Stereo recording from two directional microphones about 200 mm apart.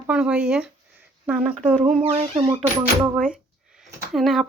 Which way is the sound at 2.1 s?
30° right (ahead or behind).